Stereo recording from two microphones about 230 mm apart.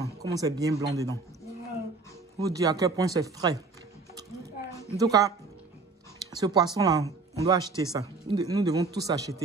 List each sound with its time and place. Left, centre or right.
0.0 s speech: centre
2.3 s speech: centre
4.9 s speech: centre
6.3 s speech: centre